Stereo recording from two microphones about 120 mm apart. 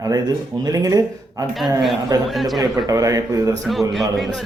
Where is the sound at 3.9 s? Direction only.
Centre (ahead or behind).